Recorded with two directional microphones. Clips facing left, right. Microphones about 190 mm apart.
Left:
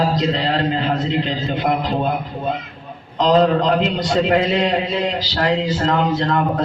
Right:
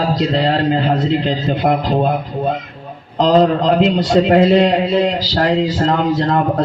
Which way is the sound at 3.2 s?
35° right (ahead or behind).